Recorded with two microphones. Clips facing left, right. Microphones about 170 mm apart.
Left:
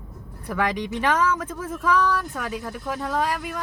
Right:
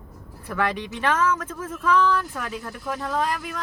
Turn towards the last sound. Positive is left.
turn(degrees=0)  # may be behind; listen again after turning